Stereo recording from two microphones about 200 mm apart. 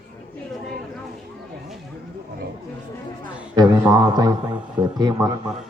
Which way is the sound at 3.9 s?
20° right (ahead or behind).